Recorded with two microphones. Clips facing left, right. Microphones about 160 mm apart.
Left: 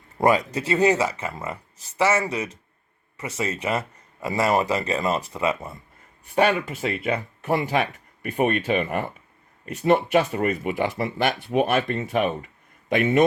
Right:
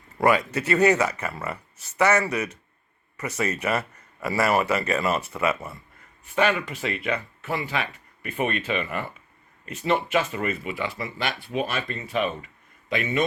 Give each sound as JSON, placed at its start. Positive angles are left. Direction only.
{"t": 0.2, "sound": "speech", "side_deg": 30}
{"t": 5.5, "sound": "speech", "side_deg": 20}
{"t": 6.3, "sound": "speech", "side_deg": 35}